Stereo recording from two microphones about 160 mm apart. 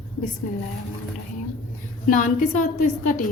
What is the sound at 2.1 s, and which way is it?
A woman's voice, 55° left (ahead or behind).